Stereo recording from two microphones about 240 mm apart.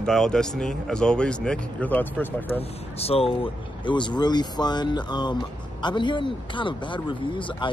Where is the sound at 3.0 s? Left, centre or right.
Left.